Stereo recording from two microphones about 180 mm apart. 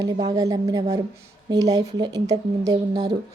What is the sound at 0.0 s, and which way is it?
Speech, 20° right (ahead or behind).